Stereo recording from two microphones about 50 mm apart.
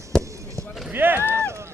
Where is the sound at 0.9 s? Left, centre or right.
Right.